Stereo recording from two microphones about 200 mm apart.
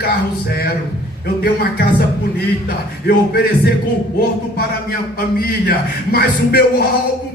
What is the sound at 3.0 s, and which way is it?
Speech, 50° left (ahead or behind).